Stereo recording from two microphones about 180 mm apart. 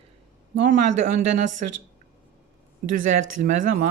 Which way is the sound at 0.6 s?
45° right (ahead or behind).